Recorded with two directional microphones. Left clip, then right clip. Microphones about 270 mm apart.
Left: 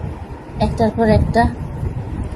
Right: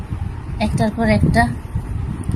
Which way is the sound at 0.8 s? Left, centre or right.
Right.